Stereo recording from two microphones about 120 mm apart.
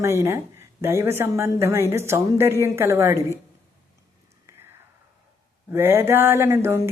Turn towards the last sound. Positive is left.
turn(degrees=-20)  # may be behind; listen again after turning